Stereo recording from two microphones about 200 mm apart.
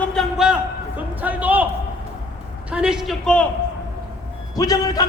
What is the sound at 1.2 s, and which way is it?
Speech, 10° right (ahead or behind).